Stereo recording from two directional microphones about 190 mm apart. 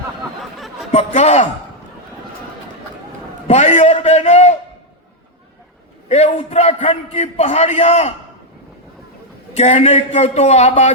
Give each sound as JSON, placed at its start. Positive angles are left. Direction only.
{"t": 0.5, "sound": "a sound", "side_deg": 0}
{"t": 0.9, "sound": "a man's voice", "side_deg": 35}
{"t": 3.4, "sound": "a man's voice", "side_deg": 35}
{"t": 6.1, "sound": "a man's voice", "side_deg": 35}
{"t": 9.6, "sound": "a man's voice", "side_deg": 35}